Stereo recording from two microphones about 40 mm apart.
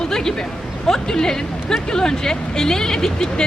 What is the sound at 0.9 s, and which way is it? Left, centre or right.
A woman's voice, centre.